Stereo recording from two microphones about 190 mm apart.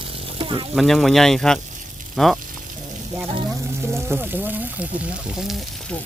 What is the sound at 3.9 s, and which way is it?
Speech, 10° right (ahead or behind).